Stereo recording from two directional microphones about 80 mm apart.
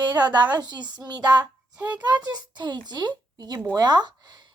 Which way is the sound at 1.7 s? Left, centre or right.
Centre.